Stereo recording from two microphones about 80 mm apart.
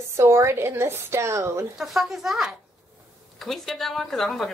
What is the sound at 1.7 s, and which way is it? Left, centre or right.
Speech, centre.